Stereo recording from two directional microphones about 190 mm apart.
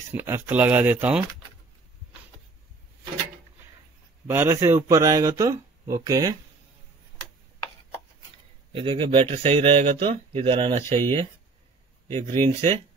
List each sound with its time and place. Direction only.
0.1 s speech: 10° right (ahead or behind)
4.3 s speech: 15° right (ahead or behind)
8.7 s speech: 25° right (ahead or behind)
12.3 s speech: 35° right (ahead or behind)